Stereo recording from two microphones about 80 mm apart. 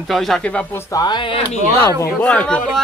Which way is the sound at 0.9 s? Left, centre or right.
Left.